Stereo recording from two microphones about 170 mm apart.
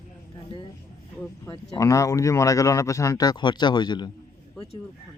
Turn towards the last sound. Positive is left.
turn(degrees=25)  # may be behind; listen again after turning